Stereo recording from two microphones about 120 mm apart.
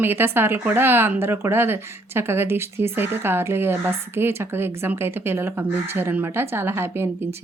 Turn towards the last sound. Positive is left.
turn(degrees=-20)  # may be behind; listen again after turning